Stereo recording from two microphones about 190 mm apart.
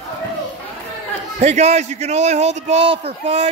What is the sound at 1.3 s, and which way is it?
A man's voice, 35° right (ahead or behind).